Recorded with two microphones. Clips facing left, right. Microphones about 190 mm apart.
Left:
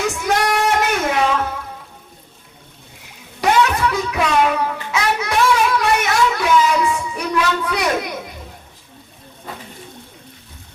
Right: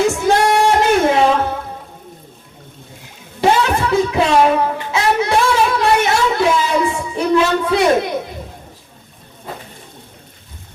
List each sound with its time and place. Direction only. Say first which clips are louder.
0.0 s music: right 5 dB; 25° right (ahead or behind)
3.4 s child singing: right 1 dB; 25° right (ahead or behind)